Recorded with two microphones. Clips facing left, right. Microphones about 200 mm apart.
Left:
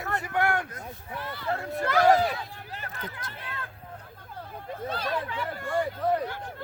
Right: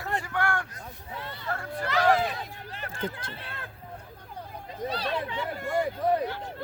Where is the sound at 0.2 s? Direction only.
20° left (ahead or behind).